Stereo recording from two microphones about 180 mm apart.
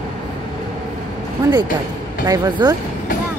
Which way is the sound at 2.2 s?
20° right (ahead or behind).